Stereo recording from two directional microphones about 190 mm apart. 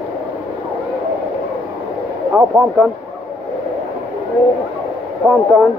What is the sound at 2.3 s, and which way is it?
Speech, 15° right (ahead or behind).